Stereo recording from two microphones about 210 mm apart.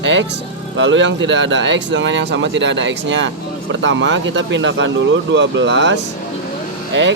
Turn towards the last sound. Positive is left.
turn(degrees=-60)  # may be behind; listen again after turning